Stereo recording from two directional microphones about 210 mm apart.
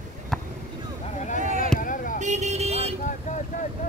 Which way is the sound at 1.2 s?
35° left (ahead or behind).